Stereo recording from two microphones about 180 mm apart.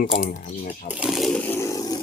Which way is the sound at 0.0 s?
50° left (ahead or behind).